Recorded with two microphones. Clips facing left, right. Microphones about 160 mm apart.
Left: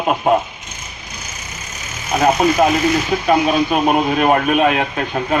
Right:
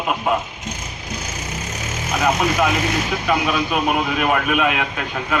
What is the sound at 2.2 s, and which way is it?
A man's voice, 35° left (ahead or behind).